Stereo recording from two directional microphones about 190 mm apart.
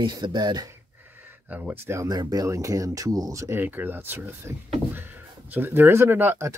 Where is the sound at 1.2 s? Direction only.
10° right (ahead or behind).